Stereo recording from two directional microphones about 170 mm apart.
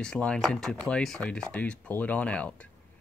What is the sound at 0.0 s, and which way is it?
Speech, 5° left (ahead or behind).